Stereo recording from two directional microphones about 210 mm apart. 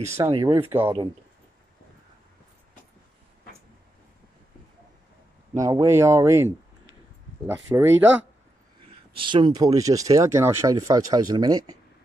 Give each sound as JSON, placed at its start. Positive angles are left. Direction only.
{"t": 0.1, "sound": "speech", "side_deg": -20}
{"t": 0.7, "sound": "speech", "side_deg": -10}
{"t": 5.5, "sound": "speech", "side_deg": -15}
{"t": 7.7, "sound": "speech", "side_deg": -10}
{"t": 9.1, "sound": "speech", "side_deg": -25}